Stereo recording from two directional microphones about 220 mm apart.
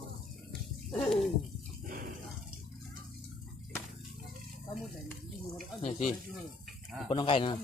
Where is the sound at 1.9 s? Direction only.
40° right (ahead or behind).